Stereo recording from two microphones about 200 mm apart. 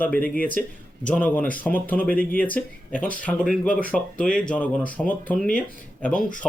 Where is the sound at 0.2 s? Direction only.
45° left (ahead or behind).